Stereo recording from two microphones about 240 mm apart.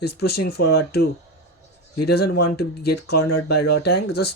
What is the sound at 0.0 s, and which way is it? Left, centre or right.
Speech, left.